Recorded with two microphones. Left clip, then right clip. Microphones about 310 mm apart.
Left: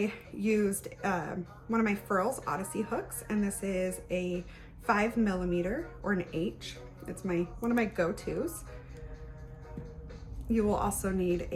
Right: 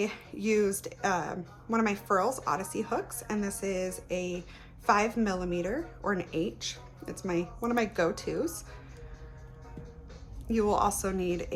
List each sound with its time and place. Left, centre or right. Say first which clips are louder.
0.0 s a woman's voice: right 1 dB; centre
10.5 s speech: right 3 dB; centre